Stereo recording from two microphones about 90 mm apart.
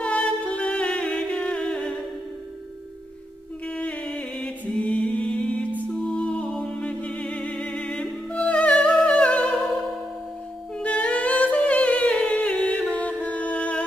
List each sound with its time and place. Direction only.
0.0 s music: 15° left (ahead or behind)
3.6 s music: 15° left (ahead or behind)
8.9 s humming: 10° left (ahead or behind)
10.8 s humming: 15° left (ahead or behind)